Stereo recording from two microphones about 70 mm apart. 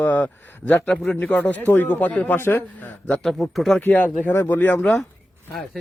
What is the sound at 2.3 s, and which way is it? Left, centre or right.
Speech, left.